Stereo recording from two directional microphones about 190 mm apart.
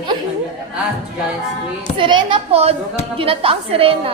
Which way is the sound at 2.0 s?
25° right (ahead or behind).